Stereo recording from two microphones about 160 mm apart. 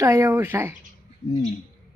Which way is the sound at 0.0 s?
15° right (ahead or behind).